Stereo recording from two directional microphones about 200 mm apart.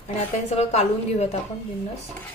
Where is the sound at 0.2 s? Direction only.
30° left (ahead or behind).